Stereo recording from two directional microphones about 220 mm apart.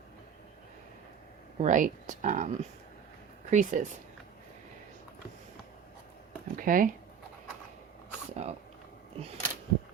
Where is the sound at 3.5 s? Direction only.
35° right (ahead or behind).